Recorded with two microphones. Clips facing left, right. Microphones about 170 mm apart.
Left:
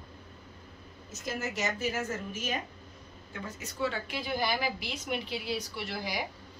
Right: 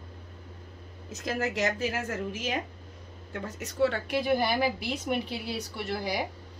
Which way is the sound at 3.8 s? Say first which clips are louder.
Right 7 dB; 60° right (ahead or behind).